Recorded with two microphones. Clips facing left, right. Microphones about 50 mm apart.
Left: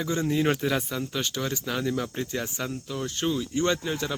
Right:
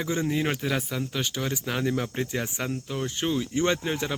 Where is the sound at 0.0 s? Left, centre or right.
Centre.